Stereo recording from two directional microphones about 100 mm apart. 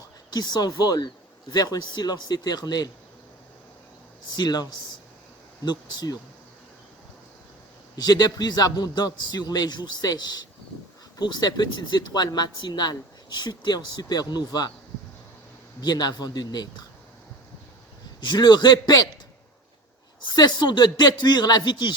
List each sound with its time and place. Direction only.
0.3 s speech: 45° left (ahead or behind)
4.3 s speech: 45° left (ahead or behind)
5.6 s speech: 45° left (ahead or behind)
7.9 s a man's voice: 40° left (ahead or behind)
15.8 s speech: 45° left (ahead or behind)
18.2 s speech: 45° left (ahead or behind)
20.3 s speech: 45° left (ahead or behind)